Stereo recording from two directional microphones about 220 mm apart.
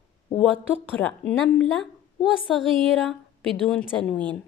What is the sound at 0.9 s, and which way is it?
A woman's voice, 5° left (ahead or behind).